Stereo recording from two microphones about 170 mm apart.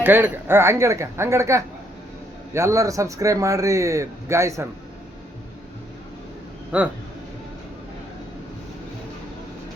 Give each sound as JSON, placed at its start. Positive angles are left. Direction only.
{"t": 0.0, "sound": "a man's voice", "side_deg": -10}
{"t": 6.7, "sound": "speech", "side_deg": -5}